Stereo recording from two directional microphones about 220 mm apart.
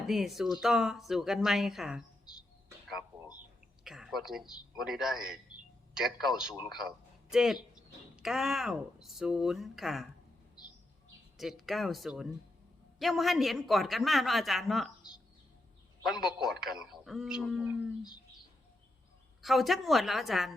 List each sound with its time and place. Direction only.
0.1 s speech: centre (ahead or behind)
3.8 s a man's voice: centre (ahead or behind)
10.6 s bird: 20° left (ahead or behind)
11.3 s speech: centre (ahead or behind)
19.4 s speech: centre (ahead or behind)